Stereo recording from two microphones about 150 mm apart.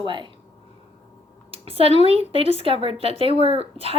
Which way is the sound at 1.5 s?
40° right (ahead or behind).